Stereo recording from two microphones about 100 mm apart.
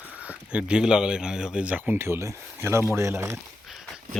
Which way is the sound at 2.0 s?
25° right (ahead or behind).